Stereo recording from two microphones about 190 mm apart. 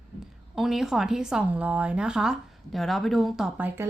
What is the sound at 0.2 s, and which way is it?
A woman's voice, centre (ahead or behind).